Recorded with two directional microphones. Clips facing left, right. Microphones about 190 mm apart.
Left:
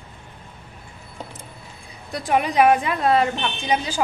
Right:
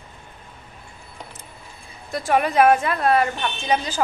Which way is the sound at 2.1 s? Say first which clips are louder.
Right 1 dB; 15° left (ahead or behind).